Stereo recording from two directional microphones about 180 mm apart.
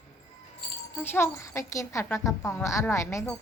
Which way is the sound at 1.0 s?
15° left (ahead or behind).